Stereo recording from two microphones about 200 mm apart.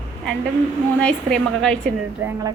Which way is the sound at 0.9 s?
5° left (ahead or behind).